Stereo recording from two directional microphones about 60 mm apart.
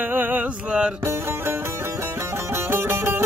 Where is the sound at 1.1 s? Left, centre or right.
Right.